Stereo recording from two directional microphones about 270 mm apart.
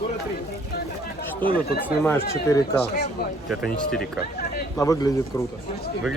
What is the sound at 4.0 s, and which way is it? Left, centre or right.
Speech, left.